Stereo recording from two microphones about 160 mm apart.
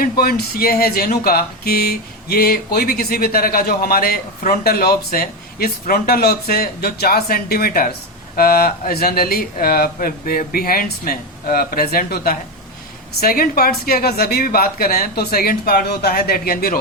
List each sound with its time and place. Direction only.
0.0 s speech: 70° left (ahead or behind)